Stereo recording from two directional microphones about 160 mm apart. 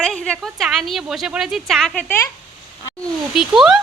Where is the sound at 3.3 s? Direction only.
5° right (ahead or behind).